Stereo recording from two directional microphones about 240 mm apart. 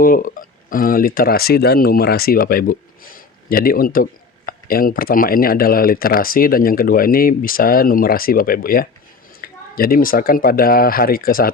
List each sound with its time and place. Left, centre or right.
0.0 s speech: left